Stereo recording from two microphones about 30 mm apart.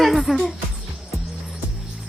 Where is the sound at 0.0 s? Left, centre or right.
Centre.